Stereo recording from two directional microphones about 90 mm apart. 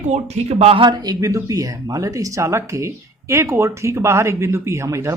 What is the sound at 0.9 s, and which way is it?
Speech, 45° right (ahead or behind).